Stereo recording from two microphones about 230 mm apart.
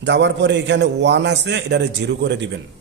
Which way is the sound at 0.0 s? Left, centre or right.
Right.